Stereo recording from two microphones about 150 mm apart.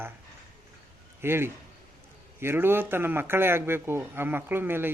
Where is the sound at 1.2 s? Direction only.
15° right (ahead or behind).